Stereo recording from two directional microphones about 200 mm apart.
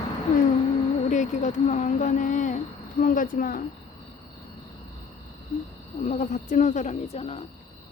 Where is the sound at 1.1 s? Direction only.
35° left (ahead or behind).